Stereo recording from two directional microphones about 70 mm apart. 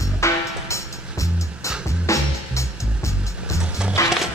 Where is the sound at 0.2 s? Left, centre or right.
Left.